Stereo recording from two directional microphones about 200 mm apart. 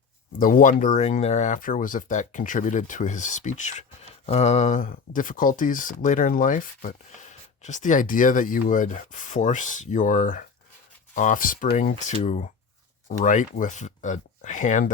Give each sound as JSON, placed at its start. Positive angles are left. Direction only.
{"t": 0.3, "sound": "speech", "side_deg": 45}